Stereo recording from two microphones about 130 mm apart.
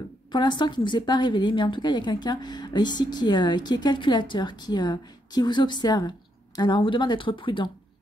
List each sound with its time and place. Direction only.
0.3 s a woman's voice: 35° left (ahead or behind)